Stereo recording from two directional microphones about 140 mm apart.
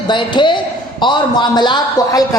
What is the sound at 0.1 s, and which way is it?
A woman's voice, 35° left (ahead or behind).